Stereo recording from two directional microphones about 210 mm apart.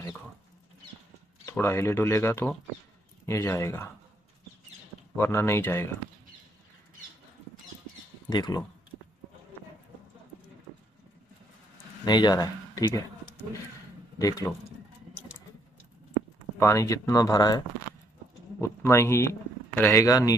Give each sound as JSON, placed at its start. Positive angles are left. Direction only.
{"t": 1.5, "sound": "speech", "side_deg": 10}
{"t": 5.1, "sound": "speech", "side_deg": 10}
{"t": 8.3, "sound": "speech", "side_deg": 20}
{"t": 12.0, "sound": "speech", "side_deg": 20}
{"t": 16.6, "sound": "speech", "side_deg": 15}
{"t": 18.6, "sound": "speech", "side_deg": 10}